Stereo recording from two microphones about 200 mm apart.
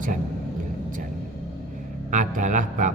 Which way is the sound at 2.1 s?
40° right (ahead or behind).